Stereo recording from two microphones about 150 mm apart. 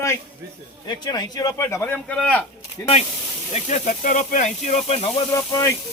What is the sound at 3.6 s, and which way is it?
Speech, 50° left (ahead or behind).